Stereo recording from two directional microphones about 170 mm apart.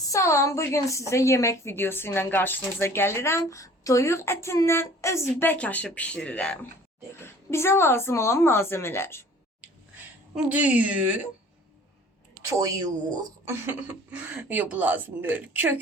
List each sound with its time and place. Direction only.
0.1 s a woman's voice: 15° left (ahead or behind)
10.3 s speech: 10° right (ahead or behind)
12.5 s speech: 20° right (ahead or behind)